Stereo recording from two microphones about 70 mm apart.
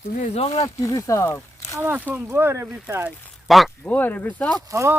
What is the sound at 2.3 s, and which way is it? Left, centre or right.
Speech, right.